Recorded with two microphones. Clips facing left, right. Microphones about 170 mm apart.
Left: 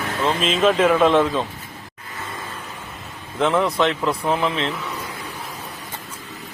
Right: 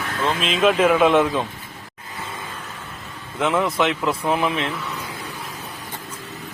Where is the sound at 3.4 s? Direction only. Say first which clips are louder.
Left 1 dB; 5° right (ahead or behind).